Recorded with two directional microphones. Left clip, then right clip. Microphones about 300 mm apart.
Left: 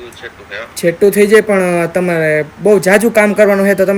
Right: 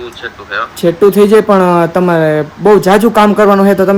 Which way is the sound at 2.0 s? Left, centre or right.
Right.